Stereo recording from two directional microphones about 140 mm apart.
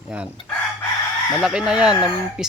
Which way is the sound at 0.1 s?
10° right (ahead or behind).